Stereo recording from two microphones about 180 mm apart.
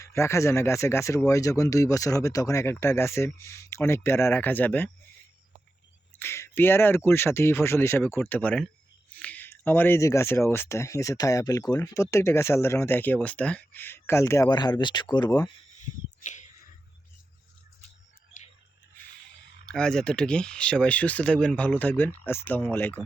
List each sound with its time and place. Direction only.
0.0 s speech: 15° left (ahead or behind)
6.1 s speech: 15° left (ahead or behind)
19.6 s speech: 5° left (ahead or behind)